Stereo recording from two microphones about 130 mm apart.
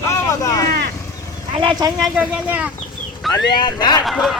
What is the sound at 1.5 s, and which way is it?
Speech, 40° right (ahead or behind).